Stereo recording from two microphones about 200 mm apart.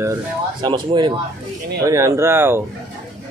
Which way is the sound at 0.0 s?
20° right (ahead or behind).